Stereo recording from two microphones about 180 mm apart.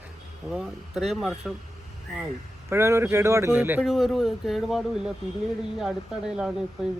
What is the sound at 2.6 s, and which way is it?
Speech, 15° right (ahead or behind).